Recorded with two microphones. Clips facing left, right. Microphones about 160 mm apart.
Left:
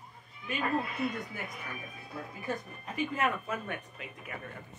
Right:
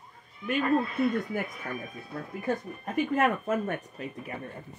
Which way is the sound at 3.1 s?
50° right (ahead or behind).